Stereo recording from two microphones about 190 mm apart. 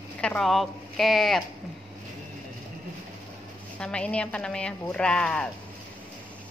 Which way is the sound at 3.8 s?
5° left (ahead or behind).